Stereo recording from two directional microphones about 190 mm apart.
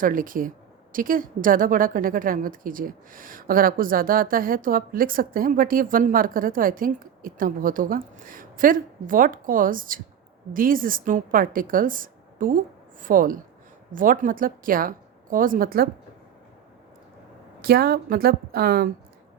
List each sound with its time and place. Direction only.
0.0 s a woman's voice: 45° right (ahead or behind)
17.6 s a woman's voice: 55° right (ahead or behind)